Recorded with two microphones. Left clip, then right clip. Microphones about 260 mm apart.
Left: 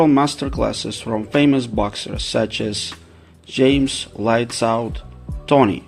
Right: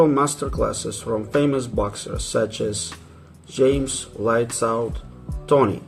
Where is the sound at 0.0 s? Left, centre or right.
Left.